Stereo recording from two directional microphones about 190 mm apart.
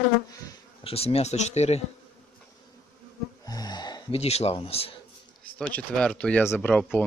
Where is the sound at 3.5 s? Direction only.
20° left (ahead or behind).